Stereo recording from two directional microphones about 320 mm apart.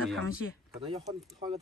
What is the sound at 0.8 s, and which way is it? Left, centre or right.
Speech, centre.